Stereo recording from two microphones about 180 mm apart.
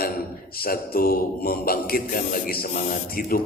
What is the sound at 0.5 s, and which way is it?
Mantra, 55° left (ahead or behind).